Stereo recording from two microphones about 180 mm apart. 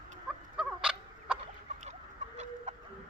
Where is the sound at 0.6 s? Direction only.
5° right (ahead or behind).